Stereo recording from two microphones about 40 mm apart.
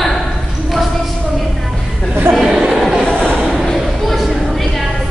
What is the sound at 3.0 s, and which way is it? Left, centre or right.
Train, left.